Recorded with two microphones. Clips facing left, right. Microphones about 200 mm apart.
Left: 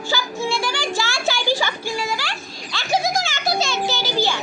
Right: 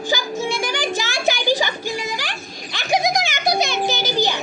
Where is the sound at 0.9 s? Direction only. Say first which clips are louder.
Right 2 dB; 20° right (ahead or behind).